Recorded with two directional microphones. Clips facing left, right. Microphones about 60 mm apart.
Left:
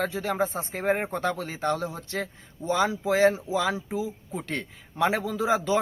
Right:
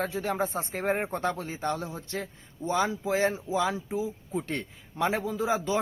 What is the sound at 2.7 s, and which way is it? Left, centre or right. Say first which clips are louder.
Speech: left 3 dB; left.